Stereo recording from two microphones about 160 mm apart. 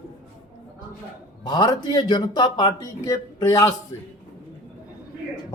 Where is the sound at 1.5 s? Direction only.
25° left (ahead or behind).